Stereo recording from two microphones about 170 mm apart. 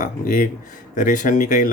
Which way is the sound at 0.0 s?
50° left (ahead or behind).